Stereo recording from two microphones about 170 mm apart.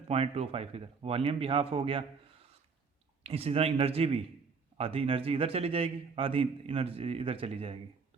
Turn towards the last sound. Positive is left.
turn(degrees=-35)  # may be behind; listen again after turning